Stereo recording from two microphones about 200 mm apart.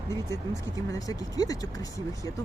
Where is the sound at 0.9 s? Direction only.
15° left (ahead or behind).